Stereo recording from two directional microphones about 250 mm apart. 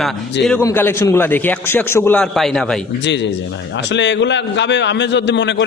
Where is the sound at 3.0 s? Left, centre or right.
Left.